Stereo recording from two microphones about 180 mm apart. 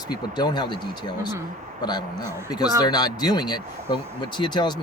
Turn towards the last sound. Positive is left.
turn(degrees=25)  # may be behind; listen again after turning